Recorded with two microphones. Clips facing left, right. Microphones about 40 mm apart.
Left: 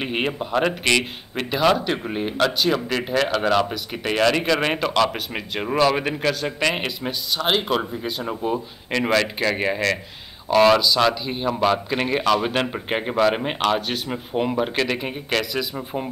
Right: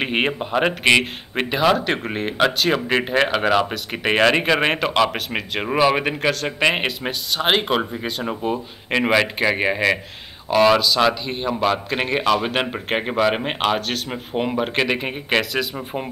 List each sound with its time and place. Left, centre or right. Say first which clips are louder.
0.0 s speech: right 3 dB; right
0.3 s speech: right 1 dB; centre
3.3 s speech: right 1 dB; centre
10.5 s speech: even; centre; by 15.8 s right